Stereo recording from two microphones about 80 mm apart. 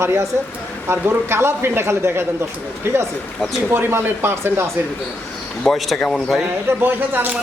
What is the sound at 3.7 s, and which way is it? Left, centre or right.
Speech, right.